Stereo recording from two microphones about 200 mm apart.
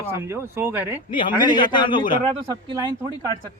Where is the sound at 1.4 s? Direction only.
20° left (ahead or behind).